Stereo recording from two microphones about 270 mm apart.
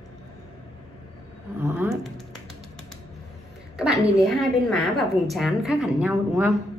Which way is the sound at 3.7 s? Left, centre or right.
Centre.